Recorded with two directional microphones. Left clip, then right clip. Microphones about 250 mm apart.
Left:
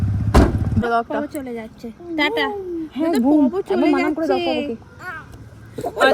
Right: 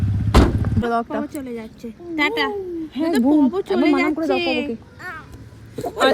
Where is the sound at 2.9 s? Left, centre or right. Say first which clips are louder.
Left 1 dB; right.